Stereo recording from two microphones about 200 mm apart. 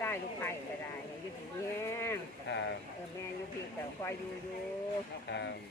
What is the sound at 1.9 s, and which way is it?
Speech, 15° left (ahead or behind).